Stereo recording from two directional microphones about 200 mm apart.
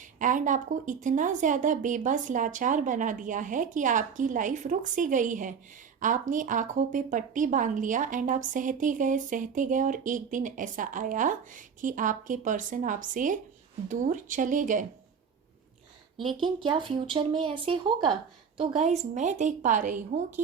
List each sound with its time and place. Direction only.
0.2 s a woman's voice: 40° right (ahead or behind)
16.2 s speech: 25° right (ahead or behind)
18.8 s a woman's voice: 35° right (ahead or behind)